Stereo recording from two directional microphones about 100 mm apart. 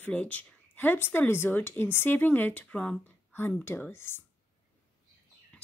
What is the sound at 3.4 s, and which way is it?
Speech, 20° left (ahead or behind).